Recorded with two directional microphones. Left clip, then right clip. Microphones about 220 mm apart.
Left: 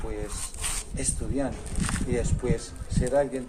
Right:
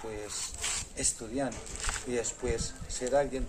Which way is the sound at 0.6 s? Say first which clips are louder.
Left 1 dB; 25° left (ahead or behind).